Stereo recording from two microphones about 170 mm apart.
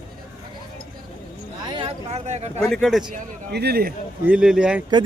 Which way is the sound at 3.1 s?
70° right (ahead or behind).